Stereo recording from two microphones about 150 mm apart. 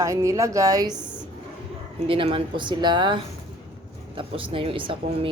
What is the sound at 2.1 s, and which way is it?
Speech, 40° right (ahead or behind).